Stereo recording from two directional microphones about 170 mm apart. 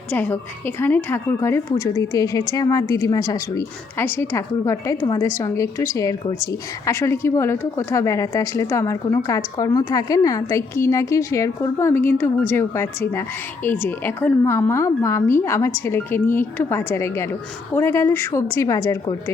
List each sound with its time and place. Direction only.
0.1 s a woman's voice: 10° left (ahead or behind)